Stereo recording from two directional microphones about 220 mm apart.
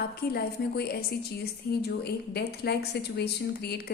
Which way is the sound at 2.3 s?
45° left (ahead or behind).